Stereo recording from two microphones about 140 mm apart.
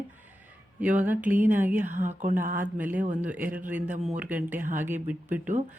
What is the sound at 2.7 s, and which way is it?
Speech, 10° right (ahead or behind).